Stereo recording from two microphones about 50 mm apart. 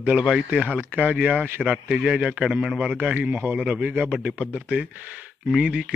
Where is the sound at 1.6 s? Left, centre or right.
Centre.